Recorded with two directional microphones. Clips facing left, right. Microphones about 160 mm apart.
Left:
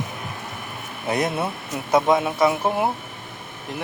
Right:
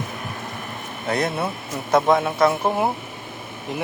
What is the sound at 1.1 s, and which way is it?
Speech, 15° left (ahead or behind).